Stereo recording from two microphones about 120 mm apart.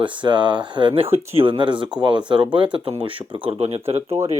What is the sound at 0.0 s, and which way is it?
Speech, 40° right (ahead or behind).